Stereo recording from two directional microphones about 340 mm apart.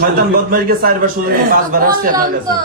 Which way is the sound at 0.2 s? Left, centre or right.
Right.